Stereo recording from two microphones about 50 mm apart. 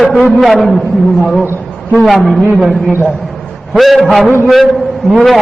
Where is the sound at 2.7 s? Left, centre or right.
Centre.